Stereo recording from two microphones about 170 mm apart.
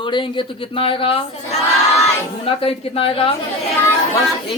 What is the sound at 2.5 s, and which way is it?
Speech, 35° left (ahead or behind).